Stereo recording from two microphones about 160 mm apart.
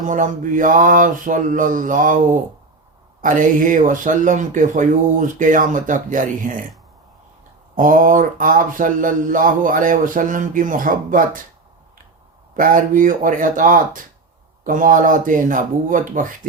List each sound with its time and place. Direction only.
0.0 s mantra: 55° right (ahead or behind)
7.8 s mantra: 55° right (ahead or behind)
12.5 s mantra: 60° right (ahead or behind)